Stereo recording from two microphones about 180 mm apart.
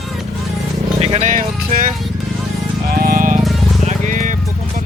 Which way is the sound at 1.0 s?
40° right (ahead or behind).